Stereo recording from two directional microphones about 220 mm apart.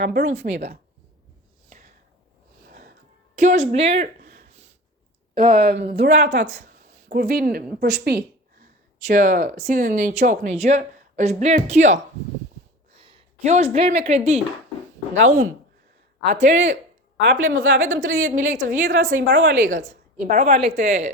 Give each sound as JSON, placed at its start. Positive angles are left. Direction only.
{"t": 0.0, "sound": "a woman's voice", "side_deg": -50}
{"t": 2.6, "sound": "music", "side_deg": -45}
{"t": 3.3, "sound": "a woman's voice", "side_deg": -35}
{"t": 4.3, "sound": "a sound", "side_deg": -50}
{"t": 5.3, "sound": "a woman's voice", "side_deg": -40}
{"t": 9.0, "sound": "speech", "side_deg": -35}
{"t": 13.0, "sound": "a sound", "side_deg": -25}
{"t": 14.0, "sound": "speech", "side_deg": -30}
{"t": 16.4, "sound": "a woman's voice", "side_deg": -50}
{"t": 17.4, "sound": "a woman's voice", "side_deg": -65}
{"t": 18.3, "sound": "speech", "side_deg": -35}
{"t": 18.8, "sound": "a woman's voice", "side_deg": -55}
{"t": 19.6, "sound": "speech", "side_deg": -35}